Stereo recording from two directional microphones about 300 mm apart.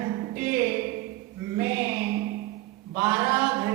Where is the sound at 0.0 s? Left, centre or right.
Centre.